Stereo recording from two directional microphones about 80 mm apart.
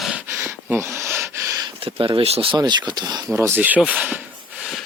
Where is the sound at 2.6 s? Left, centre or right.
Right.